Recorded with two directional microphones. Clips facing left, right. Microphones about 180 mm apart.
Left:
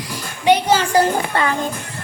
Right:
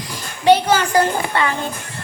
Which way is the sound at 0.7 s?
30° left (ahead or behind).